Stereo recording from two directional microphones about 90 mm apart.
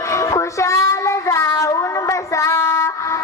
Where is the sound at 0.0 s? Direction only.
35° left (ahead or behind).